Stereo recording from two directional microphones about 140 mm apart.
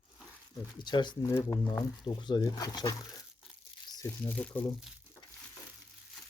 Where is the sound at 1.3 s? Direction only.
20° left (ahead or behind).